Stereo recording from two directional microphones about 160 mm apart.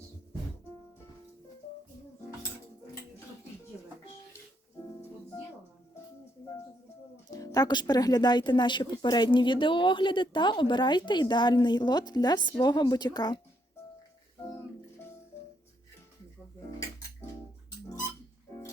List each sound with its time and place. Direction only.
7.3 s speech: 20° left (ahead or behind)